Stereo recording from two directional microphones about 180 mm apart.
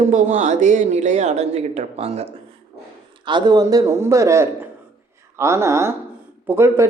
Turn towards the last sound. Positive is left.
turn(degrees=-15)  # may be behind; listen again after turning